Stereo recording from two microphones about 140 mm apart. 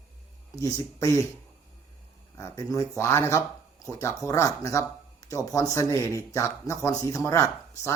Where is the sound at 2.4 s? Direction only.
20° left (ahead or behind).